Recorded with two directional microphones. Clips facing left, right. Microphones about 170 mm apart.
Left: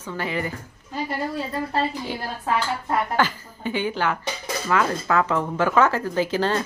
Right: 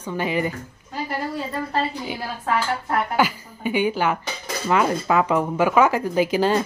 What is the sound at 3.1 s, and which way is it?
Speech, 10° right (ahead or behind).